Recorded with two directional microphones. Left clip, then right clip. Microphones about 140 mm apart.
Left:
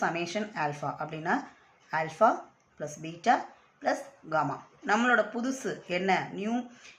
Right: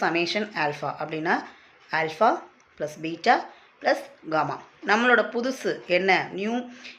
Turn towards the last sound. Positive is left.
turn(degrees=-15)  # may be behind; listen again after turning